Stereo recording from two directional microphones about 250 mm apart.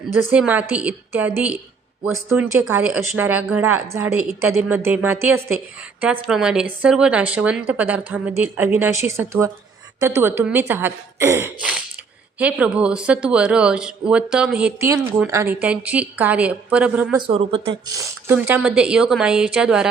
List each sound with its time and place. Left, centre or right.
0.3 s speech: centre
17.2 s speech: right; by 19.9 s centre